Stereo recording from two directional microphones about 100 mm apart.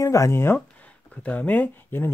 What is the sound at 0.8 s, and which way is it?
Speech, 15° left (ahead or behind).